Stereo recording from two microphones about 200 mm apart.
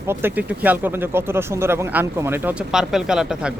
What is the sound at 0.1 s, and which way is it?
Speech, 10° right (ahead or behind).